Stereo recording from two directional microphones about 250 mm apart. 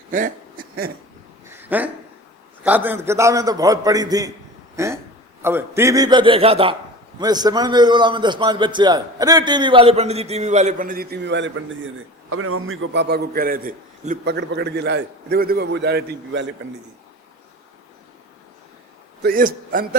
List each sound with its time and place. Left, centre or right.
0.1 s a sound: right
1.5 s a sound: centre
2.6 s a man's voice: centre; by 11.9 s right
12.3 s a man's voice: right
14.3 s a man's voice: right
19.2 s a man's voice: right